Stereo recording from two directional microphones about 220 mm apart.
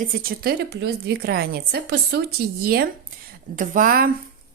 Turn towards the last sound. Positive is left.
turn(degrees=-40)  # may be behind; listen again after turning